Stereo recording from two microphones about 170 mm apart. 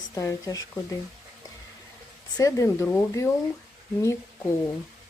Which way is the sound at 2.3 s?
20° left (ahead or behind).